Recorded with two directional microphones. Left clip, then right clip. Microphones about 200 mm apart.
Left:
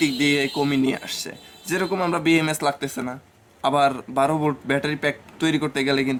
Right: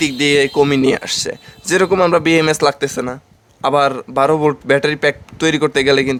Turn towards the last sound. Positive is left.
turn(degrees=-50)  # may be behind; listen again after turning